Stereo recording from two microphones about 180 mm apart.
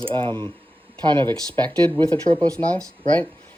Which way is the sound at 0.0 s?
30° right (ahead or behind).